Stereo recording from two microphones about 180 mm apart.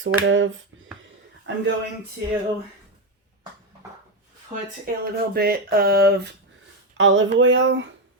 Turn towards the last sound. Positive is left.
turn(degrees=-90)